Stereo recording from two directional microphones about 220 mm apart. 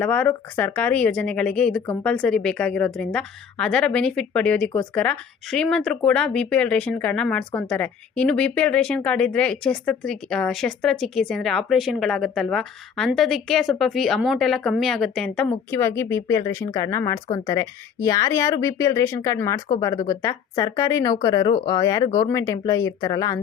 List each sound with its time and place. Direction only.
0.0 s a woman's voice: 5° left (ahead or behind)